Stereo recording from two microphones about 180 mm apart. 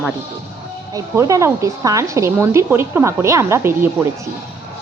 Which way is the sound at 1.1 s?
15° right (ahead or behind).